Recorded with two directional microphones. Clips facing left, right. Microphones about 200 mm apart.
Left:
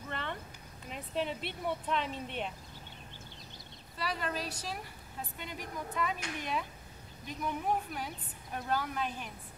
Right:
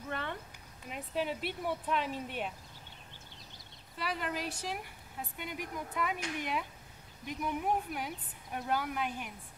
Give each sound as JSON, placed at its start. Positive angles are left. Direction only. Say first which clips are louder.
{"t": 0.1, "sound": "a sound", "louder": "right 1 dB", "side_deg": -10}
{"t": 0.8, "sound": "speech", "louder": "even", "side_deg": -5}
{"t": 4.0, "sound": "speech", "louder": "even", "side_deg": -15}